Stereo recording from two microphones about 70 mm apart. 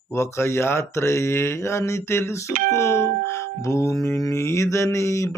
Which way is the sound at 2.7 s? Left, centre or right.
Left.